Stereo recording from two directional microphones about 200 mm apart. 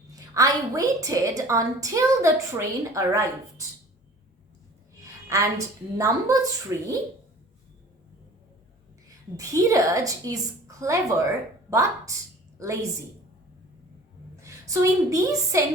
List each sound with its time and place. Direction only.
0.3 s a woman's voice: 15° right (ahead or behind)
5.3 s a woman's voice: 15° right (ahead or behind)
9.3 s a woman's voice: 15° right (ahead or behind)
14.4 s a woman's voice: 15° right (ahead or behind)